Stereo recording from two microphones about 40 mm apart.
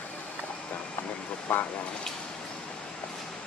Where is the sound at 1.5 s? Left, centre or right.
Left.